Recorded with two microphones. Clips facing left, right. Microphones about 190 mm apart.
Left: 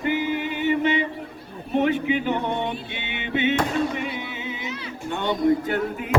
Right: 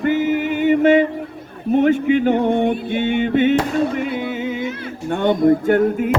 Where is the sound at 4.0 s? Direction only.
50° right (ahead or behind).